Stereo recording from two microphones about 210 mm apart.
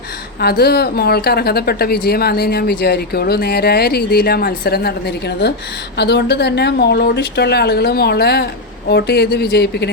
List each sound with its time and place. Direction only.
0.3 s a woman's voice: 50° left (ahead or behind)